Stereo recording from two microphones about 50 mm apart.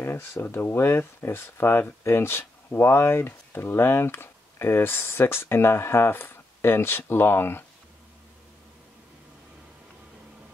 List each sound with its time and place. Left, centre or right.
0.0 s speech: left